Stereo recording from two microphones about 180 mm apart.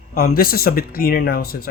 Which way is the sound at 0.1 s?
55° left (ahead or behind).